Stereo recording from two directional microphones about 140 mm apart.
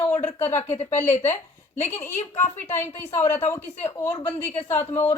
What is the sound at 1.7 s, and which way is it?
Speech, 15° left (ahead or behind).